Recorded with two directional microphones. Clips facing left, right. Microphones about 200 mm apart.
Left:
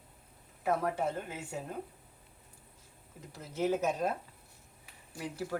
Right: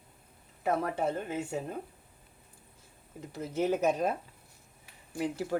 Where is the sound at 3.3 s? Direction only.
20° right (ahead or behind).